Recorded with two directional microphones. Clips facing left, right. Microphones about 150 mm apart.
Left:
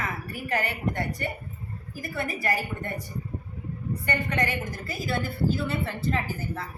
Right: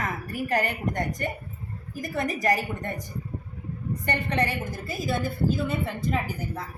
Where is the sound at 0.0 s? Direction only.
40° right (ahead or behind).